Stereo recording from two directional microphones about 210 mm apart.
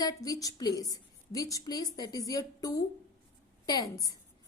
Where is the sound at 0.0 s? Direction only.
15° left (ahead or behind).